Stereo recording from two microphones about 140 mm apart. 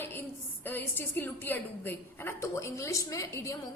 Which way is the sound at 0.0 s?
15° left (ahead or behind).